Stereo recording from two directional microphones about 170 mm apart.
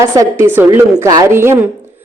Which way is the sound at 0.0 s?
15° right (ahead or behind).